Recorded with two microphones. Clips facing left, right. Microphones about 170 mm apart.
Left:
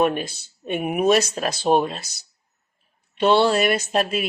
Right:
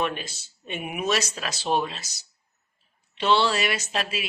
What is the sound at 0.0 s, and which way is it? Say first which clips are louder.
Speech: left 8 dB; 50° left (ahead or behind).